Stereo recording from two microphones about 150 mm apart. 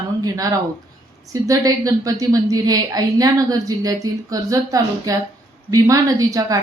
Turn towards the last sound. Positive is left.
turn(degrees=-25)  # may be behind; listen again after turning